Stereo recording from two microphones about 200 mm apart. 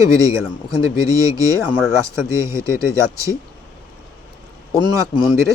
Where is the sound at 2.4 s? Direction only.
15° right (ahead or behind).